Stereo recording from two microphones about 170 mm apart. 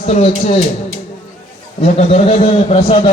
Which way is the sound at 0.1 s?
40° left (ahead or behind).